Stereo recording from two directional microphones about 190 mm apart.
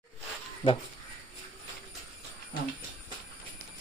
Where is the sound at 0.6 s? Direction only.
25° left (ahead or behind).